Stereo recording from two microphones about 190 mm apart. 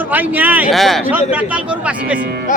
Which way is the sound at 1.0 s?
10° right (ahead or behind).